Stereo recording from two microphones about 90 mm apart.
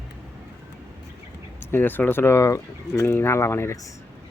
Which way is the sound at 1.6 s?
25° left (ahead or behind).